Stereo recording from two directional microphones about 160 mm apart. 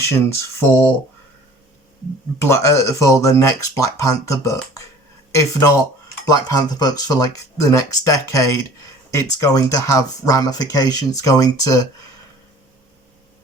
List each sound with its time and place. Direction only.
0.0 s speech: 15° left (ahead or behind)
2.5 s speech: 20° left (ahead or behind)